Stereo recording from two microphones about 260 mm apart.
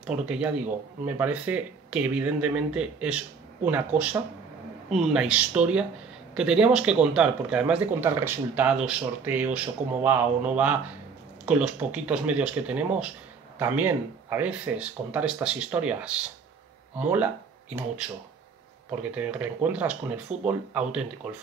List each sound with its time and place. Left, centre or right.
0.0 s speech: centre
19.1 s speech: centre